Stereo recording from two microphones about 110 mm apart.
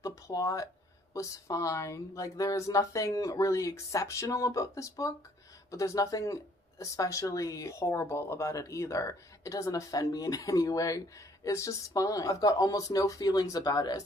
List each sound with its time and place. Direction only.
0.0 s speech: 30° left (ahead or behind)